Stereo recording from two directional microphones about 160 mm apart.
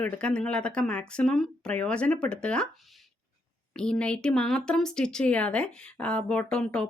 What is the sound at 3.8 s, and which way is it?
Speech, 5° left (ahead or behind).